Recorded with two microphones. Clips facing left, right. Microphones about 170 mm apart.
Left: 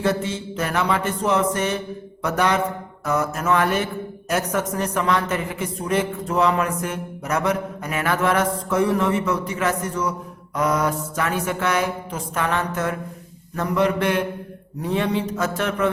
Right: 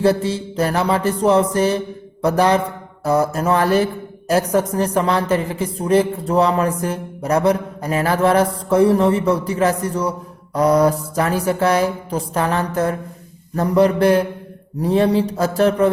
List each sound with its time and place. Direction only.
0.0 s a woman's voice: 35° right (ahead or behind)